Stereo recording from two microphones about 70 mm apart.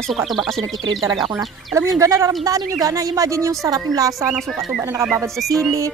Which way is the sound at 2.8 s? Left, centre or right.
Right.